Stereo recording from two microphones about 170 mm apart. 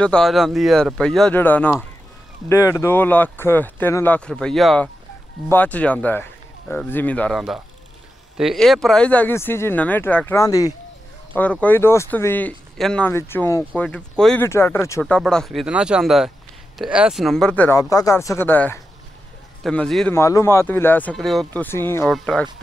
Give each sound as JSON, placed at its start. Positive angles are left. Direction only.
{"t": 0.0, "sound": "speech", "side_deg": 5}
{"t": 13.1, "sound": "speech", "side_deg": 15}
{"t": 17.7, "sound": "speech", "side_deg": 20}
{"t": 20.1, "sound": "speech", "side_deg": 15}
{"t": 21.6, "sound": "speech", "side_deg": 15}
{"t": 22.0, "sound": "speech", "side_deg": 0}